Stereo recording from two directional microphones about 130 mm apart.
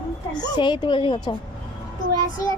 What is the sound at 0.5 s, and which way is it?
Speech, 35° left (ahead or behind).